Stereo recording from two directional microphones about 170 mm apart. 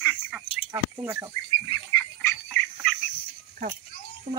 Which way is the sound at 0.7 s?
15° right (ahead or behind).